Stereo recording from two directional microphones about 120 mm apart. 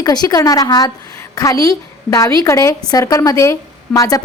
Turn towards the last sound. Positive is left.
turn(degrees=30)  # may be behind; listen again after turning